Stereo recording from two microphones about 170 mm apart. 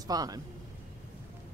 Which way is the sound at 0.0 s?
20° right (ahead or behind).